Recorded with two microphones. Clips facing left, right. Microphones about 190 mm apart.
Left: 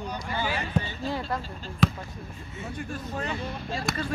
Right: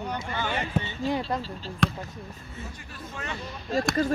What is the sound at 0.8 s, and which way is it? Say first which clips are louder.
Speech: right 4 dB; 20° right (ahead or behind).